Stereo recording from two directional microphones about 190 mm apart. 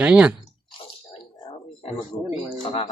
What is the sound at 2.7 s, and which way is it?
Speech, 30° left (ahead or behind).